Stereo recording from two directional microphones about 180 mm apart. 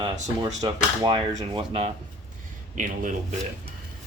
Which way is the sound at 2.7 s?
45° right (ahead or behind).